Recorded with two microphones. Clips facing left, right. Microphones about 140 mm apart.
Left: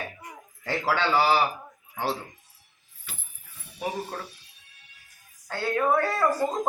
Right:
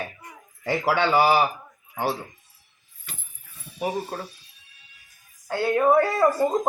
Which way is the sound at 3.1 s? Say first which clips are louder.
Right 1 dB; centre (ahead or behind).